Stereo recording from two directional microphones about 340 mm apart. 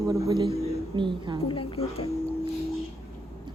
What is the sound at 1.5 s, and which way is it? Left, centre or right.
Speech, centre.